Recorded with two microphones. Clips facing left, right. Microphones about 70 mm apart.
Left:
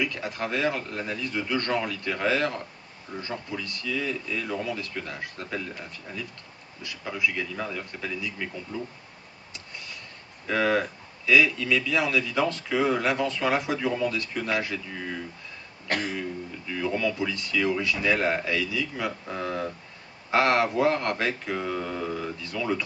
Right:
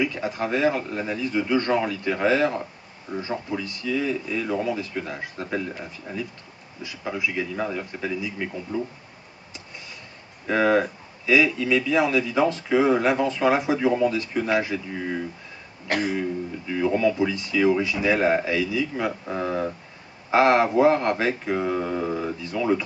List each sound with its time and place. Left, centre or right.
0.0 s speech: centre
7.5 s speech: centre
7.8 s speech: centre
10.4 s speech: centre
15.0 s speech: right
15.9 s speech: centre
16.2 s speech: centre
22.4 s speech: centre